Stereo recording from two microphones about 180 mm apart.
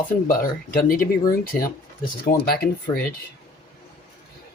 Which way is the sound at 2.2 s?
55° left (ahead or behind).